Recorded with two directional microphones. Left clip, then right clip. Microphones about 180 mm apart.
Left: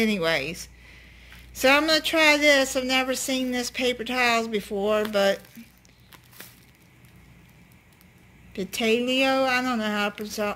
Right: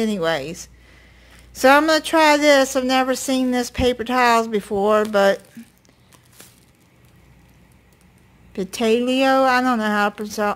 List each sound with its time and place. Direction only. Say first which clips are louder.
0.0 s a woman's voice: right 2 dB; 10° right (ahead or behind); by 5.4 s 30° right (ahead or behind)
8.5 s a woman's voice: right 5 dB; 30° right (ahead or behind)